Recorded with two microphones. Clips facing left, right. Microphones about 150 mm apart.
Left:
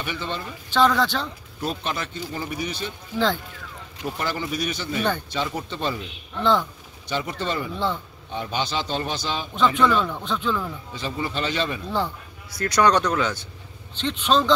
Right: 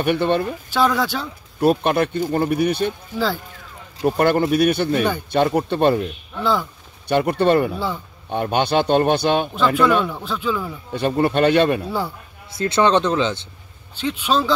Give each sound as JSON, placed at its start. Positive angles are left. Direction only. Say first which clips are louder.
{"t": 0.0, "sound": "speech", "louder": "right 12 dB", "side_deg": -60}
{"t": 0.7, "sound": "speech", "louder": "even", "side_deg": -10}
{"t": 1.6, "sound": "speech", "louder": "right 12 dB", "side_deg": -60}
{"t": 4.2, "sound": "speech", "louder": "right 12 dB", "side_deg": -60}
{"t": 6.3, "sound": "speech", "louder": "even", "side_deg": -5}
{"t": 7.1, "sound": "speech", "louder": "right 11 dB", "side_deg": -60}
{"t": 7.7, "sound": "speech", "louder": "right 1 dB", "side_deg": -10}
{"t": 8.3, "sound": "speech", "louder": "right 8 dB", "side_deg": -55}
{"t": 10.0, "sound": "speech", "louder": "right 2 dB", "side_deg": -5}
{"t": 10.9, "sound": "speech", "louder": "right 15 dB", "side_deg": -60}
{"t": 12.4, "sound": "speech", "louder": "right 2 dB", "side_deg": -25}
{"t": 13.9, "sound": "speech", "louder": "right 1 dB", "side_deg": -10}